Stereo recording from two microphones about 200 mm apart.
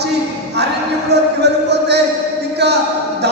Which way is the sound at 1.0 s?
55° right (ahead or behind).